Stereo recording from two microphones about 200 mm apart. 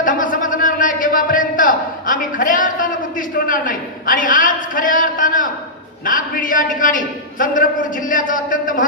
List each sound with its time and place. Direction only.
0.0 s a man's voice: 40° left (ahead or behind)